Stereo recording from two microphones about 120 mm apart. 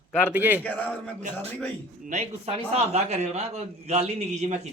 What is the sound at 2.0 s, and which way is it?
A man's voice, 65° right (ahead or behind).